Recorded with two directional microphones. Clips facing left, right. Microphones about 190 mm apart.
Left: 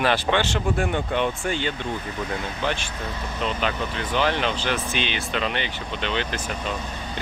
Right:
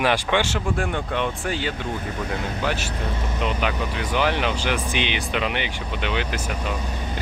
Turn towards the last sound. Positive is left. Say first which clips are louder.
# right 1 dB
turn(degrees=-10)  # may be behind; listen again after turning